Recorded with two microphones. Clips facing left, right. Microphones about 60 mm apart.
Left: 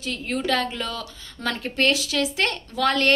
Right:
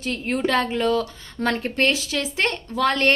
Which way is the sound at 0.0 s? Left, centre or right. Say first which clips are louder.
Right 3 dB; right.